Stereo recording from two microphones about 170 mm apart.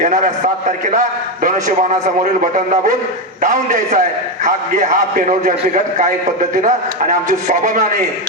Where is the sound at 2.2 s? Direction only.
45° right (ahead or behind).